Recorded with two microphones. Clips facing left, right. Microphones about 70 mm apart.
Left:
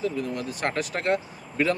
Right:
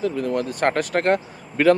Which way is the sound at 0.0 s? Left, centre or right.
Right.